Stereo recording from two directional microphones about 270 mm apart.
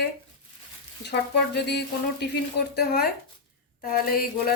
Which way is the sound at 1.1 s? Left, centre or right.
Left.